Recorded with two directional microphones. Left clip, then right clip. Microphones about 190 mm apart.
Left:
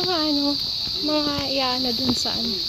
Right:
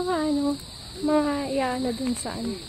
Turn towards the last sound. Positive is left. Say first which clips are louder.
# left 4 dB
turn(degrees=-10)  # may be behind; listen again after turning